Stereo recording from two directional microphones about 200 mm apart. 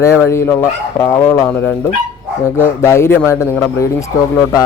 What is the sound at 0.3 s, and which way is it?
A man's voice, 15° left (ahead or behind).